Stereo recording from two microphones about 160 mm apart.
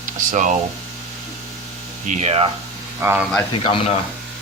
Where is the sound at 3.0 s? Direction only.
15° right (ahead or behind).